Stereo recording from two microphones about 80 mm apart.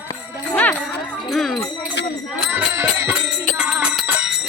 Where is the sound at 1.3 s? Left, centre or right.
Centre.